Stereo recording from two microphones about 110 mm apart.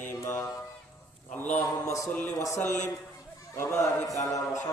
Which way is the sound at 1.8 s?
30° left (ahead or behind).